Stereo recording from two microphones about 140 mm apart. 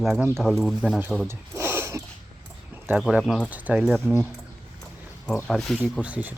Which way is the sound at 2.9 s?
5° right (ahead or behind).